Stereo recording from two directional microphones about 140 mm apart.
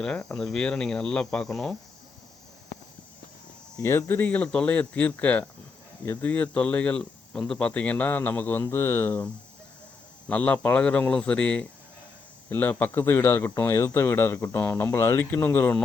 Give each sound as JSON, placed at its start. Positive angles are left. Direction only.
{"t": 0.0, "sound": "speech", "side_deg": 5}
{"t": 3.8, "sound": "speech", "side_deg": 20}